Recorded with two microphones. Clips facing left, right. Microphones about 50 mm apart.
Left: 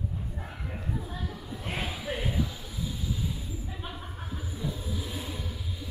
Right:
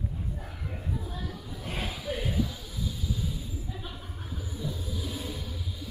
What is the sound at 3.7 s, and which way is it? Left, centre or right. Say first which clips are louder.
Vehicle: left 1 dB; centre.